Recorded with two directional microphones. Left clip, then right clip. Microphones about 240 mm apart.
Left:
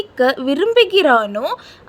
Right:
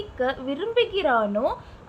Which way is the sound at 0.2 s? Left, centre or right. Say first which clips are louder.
Left 11 dB; left.